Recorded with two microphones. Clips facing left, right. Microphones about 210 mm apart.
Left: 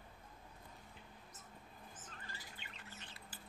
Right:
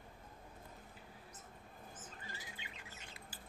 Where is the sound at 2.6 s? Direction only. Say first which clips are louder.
Right 1 dB; 10° right (ahead or behind).